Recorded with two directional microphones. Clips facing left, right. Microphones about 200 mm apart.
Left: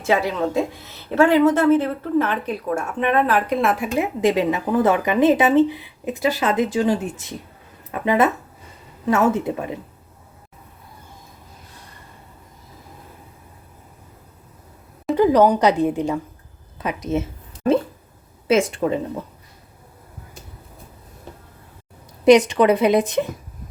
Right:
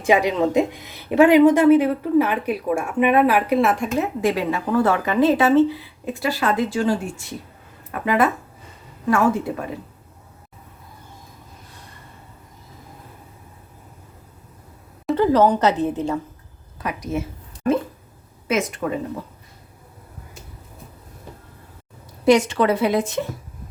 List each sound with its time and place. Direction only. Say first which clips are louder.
0.0 s a woman's voice: right 2 dB; 15° right (ahead or behind)
3.9 s a woman's voice: left 2 dB; 15° left (ahead or behind)
15.1 s a woman's voice: left 1 dB; 15° left (ahead or behind)
18.4 s a woman's voice: left 4 dB; 30° left (ahead or behind)
22.2 s a woman's voice: left 3 dB; 20° left (ahead or behind)